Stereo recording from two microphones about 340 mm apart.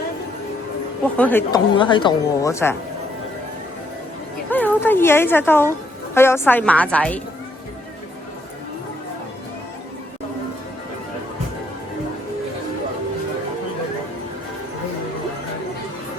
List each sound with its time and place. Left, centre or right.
1.1 s speech: centre
4.4 s a woman's voice: centre